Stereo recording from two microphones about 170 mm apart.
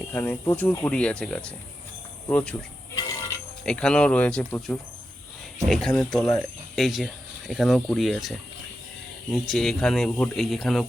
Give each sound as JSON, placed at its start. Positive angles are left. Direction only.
{"t": 0.1, "sound": "speech", "side_deg": 15}
{"t": 2.9, "sound": "a sound", "side_deg": 20}
{"t": 3.7, "sound": "speech", "side_deg": 5}